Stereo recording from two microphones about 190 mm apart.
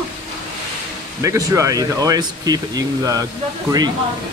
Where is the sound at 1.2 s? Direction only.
15° right (ahead or behind).